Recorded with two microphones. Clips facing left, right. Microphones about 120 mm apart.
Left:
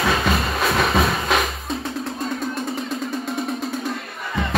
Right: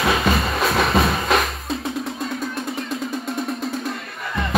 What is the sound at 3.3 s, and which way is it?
Music, centre (ahead or behind).